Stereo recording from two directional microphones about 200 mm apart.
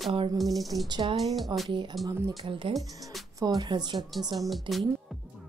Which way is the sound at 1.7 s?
25° right (ahead or behind).